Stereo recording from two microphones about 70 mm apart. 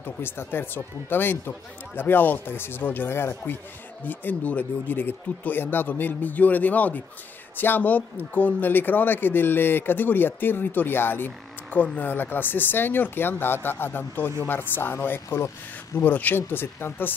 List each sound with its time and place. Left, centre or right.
0.0 s a man's voice: left